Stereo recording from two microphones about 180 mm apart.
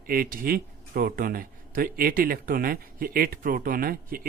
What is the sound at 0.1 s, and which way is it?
Speech, 50° right (ahead or behind).